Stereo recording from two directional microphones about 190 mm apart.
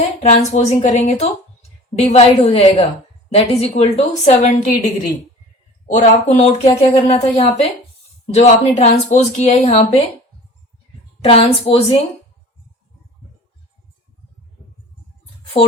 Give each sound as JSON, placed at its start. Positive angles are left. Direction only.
{"t": 0.2, "sound": "a woman's voice", "side_deg": 35}
{"t": 5.9, "sound": "a woman's voice", "side_deg": 40}
{"t": 11.2, "sound": "a woman's voice", "side_deg": 30}